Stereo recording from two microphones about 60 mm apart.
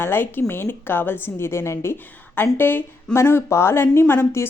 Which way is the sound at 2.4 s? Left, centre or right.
Left.